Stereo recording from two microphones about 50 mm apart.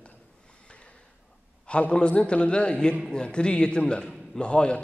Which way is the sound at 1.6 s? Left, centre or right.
Left.